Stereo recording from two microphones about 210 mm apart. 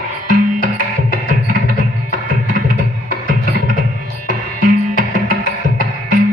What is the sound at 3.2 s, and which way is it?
Music, 40° right (ahead or behind).